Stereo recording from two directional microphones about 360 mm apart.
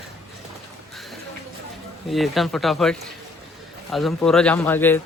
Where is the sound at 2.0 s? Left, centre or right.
Centre.